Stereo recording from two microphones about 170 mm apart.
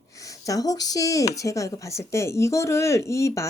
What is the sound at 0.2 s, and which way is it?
A woman's voice, 20° left (ahead or behind).